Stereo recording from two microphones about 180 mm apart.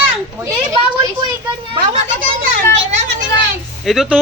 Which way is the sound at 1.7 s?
40° right (ahead or behind).